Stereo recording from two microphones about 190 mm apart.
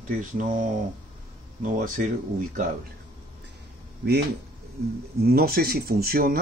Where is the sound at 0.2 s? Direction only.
45° right (ahead or behind).